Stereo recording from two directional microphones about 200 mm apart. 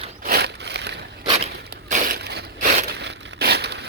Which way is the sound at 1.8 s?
40° right (ahead or behind).